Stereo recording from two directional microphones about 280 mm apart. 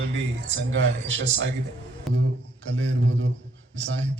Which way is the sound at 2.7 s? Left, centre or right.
Right.